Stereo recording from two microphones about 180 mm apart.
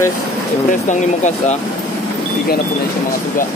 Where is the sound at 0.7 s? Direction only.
45° left (ahead or behind).